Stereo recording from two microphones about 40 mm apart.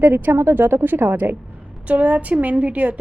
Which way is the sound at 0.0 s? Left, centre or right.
Right.